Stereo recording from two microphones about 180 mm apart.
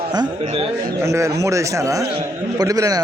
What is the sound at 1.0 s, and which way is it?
A man's voice, 15° right (ahead or behind).